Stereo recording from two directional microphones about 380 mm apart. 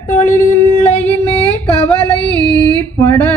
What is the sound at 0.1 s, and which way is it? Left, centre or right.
Speech, centre.